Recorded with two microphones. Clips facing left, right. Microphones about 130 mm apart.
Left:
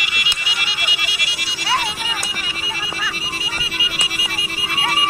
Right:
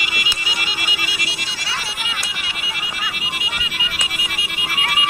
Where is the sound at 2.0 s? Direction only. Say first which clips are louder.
Left 2 dB; 40° left (ahead or behind).